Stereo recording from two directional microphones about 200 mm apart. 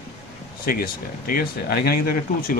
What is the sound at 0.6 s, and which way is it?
Speech, 45° left (ahead or behind).